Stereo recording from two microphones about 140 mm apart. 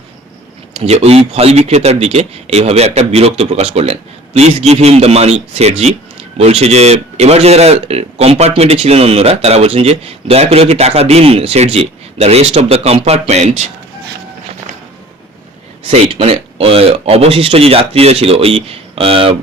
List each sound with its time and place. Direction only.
0.8 s speech: 45° right (ahead or behind)
15.9 s speech: 45° right (ahead or behind)